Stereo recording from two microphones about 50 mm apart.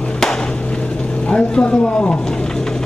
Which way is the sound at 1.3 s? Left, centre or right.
Centre.